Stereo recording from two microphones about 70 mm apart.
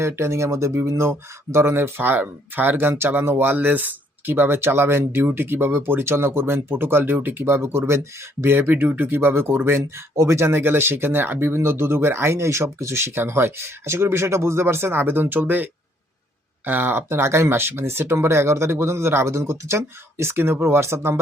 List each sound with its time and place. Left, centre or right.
0.2 s speech: right